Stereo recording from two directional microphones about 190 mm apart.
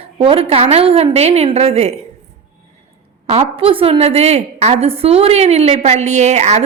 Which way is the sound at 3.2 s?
35° right (ahead or behind).